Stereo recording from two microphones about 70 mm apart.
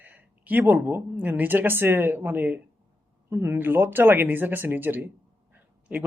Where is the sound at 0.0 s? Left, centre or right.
Right.